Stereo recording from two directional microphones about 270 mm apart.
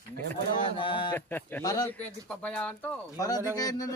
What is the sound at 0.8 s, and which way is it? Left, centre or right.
Speech, centre.